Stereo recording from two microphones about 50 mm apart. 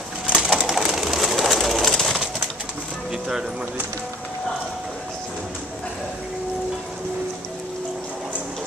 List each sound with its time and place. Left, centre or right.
0.3 s bird: centre
3.1 s music: centre